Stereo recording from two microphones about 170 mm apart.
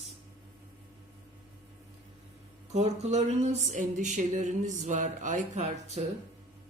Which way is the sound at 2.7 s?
40° right (ahead or behind).